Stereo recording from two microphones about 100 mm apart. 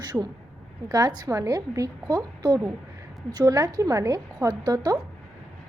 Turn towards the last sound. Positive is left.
turn(degrees=-40)  # may be behind; listen again after turning